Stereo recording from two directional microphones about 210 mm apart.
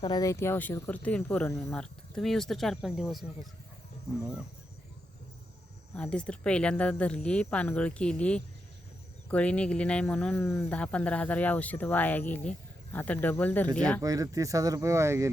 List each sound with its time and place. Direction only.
0.0 s speech: 20° left (ahead or behind); by 4.4 s 5° right (ahead or behind)
5.9 s speech: 5° left (ahead or behind)
14.0 s speech: 15° right (ahead or behind)